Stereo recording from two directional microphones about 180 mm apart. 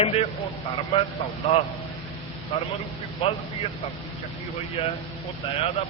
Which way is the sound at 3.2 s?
30° left (ahead or behind).